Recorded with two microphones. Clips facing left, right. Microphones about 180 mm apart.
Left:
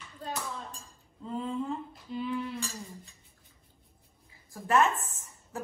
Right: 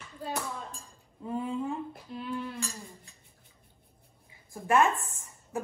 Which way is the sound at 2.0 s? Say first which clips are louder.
Left 5 dB; centre (ahead or behind).